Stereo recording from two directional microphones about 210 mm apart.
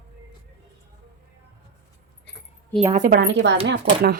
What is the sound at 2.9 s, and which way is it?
Speech, 40° right (ahead or behind).